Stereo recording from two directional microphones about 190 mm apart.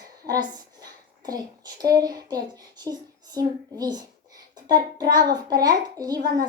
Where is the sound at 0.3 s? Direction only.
20° right (ahead or behind).